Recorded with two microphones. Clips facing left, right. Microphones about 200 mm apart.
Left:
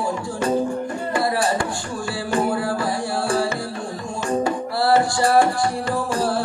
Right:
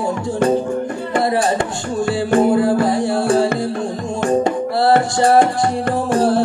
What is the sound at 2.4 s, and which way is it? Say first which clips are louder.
Music: right 8 dB; 20° right (ahead or behind).